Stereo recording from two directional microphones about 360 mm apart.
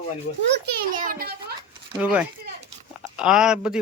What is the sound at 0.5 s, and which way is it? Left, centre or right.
A child's voice, right.